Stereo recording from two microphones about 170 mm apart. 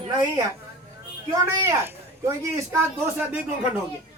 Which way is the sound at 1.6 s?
15° right (ahead or behind).